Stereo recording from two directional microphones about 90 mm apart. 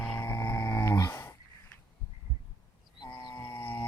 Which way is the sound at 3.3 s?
20° left (ahead or behind).